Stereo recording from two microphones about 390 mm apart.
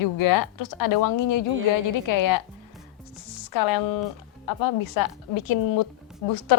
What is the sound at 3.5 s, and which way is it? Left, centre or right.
A woman's voice, left.